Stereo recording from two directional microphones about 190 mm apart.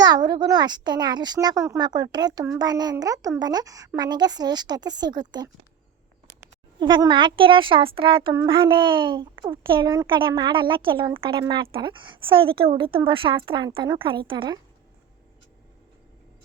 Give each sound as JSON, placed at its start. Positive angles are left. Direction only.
{"t": 0.0, "sound": "speech", "side_deg": -20}
{"t": 6.7, "sound": "speech", "side_deg": -25}